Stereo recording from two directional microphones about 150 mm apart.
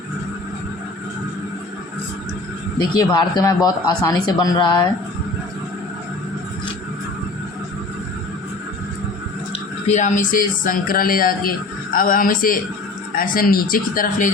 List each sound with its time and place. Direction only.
2.7 s speech: 25° left (ahead or behind)
9.8 s speech: 50° left (ahead or behind)